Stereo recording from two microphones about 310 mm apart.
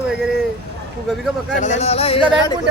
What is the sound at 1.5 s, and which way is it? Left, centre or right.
Speech, left.